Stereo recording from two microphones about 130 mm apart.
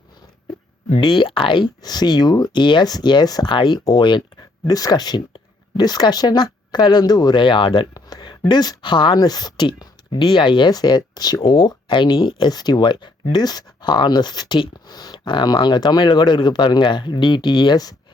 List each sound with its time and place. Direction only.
0.9 s speech: 40° left (ahead or behind)